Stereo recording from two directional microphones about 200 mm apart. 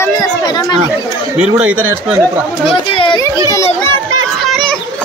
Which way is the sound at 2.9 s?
25° left (ahead or behind).